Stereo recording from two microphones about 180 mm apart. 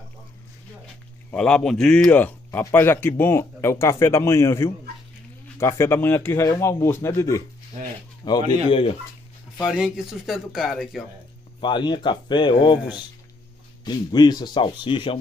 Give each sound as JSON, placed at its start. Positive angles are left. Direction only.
{"t": 1.3, "sound": "speech", "side_deg": 5}
{"t": 9.7, "sound": "speech", "side_deg": -5}
{"t": 11.6, "sound": "speech", "side_deg": 25}